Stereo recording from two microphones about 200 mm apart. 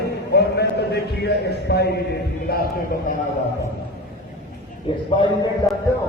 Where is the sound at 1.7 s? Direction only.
55° left (ahead or behind).